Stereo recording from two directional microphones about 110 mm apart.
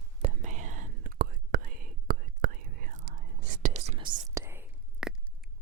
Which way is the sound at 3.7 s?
80° right.